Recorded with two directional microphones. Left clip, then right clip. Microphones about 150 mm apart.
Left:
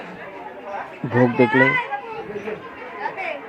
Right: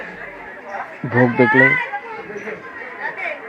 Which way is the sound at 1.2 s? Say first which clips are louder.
Right 3 dB; centre (ahead or behind).